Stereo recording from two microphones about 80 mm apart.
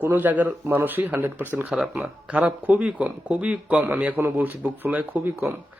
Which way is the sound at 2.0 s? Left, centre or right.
Centre.